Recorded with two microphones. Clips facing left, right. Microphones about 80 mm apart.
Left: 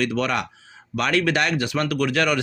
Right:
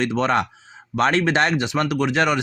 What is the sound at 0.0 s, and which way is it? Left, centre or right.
Speech, right.